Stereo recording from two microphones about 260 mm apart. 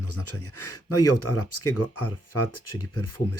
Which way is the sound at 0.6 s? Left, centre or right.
Left.